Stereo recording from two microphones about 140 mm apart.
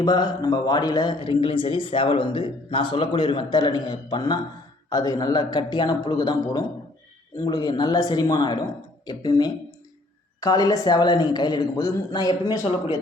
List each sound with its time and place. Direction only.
0.0 s a man's voice: 30° left (ahead or behind)